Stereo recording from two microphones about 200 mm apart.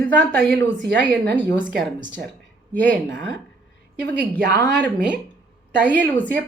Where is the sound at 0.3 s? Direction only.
5° left (ahead or behind).